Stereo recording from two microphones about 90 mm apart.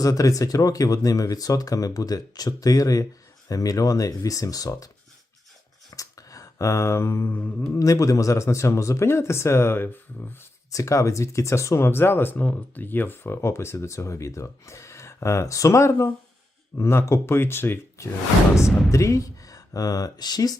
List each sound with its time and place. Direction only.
0.0 s speech: 40° left (ahead or behind)
5.9 s a sound: 40° left (ahead or behind)
7.3 s mantra: 15° left (ahead or behind)
7.8 s speech: 40° left (ahead or behind)
10.7 s speech: 35° left (ahead or behind)